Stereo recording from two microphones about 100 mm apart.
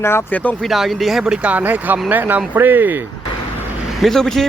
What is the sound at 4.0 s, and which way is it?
Speech, 5° left (ahead or behind).